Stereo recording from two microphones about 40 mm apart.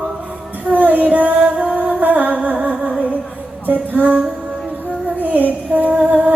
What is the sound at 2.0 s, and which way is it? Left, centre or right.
Music, right.